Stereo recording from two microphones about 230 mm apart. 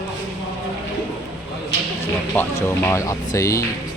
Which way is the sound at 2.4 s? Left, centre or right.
Centre.